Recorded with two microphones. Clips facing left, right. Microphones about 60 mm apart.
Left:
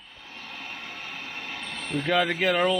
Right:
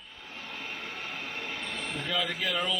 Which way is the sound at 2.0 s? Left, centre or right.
Left.